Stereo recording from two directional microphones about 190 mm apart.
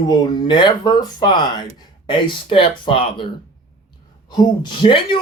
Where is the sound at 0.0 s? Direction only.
25° left (ahead or behind).